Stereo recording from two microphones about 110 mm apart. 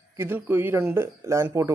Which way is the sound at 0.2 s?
20° right (ahead or behind).